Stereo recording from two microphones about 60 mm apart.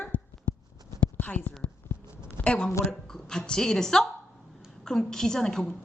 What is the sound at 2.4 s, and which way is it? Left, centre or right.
A woman's voice, centre.